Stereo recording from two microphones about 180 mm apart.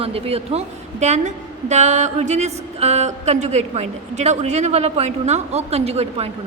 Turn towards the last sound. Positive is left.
turn(degrees=-35)  # may be behind; listen again after turning